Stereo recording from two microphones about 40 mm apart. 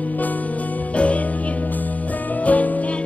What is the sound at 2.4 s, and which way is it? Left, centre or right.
Music, left.